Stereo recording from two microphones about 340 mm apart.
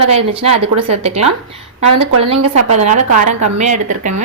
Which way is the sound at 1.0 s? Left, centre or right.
Centre.